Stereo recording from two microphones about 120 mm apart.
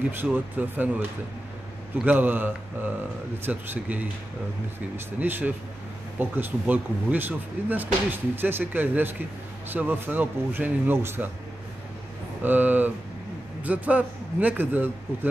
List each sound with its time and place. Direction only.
0.2 s speech: 15° right (ahead or behind)
2.0 s speech: 15° right (ahead or behind)
12.4 s speech: 15° right (ahead or behind)